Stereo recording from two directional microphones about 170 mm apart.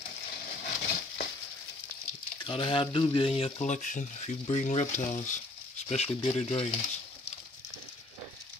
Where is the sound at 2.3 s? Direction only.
30° left (ahead or behind).